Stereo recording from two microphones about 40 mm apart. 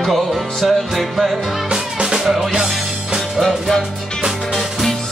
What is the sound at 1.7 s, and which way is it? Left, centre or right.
Music, centre.